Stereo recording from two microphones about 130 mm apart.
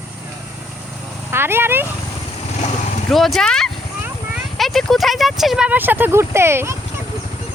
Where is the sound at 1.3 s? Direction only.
20° right (ahead or behind).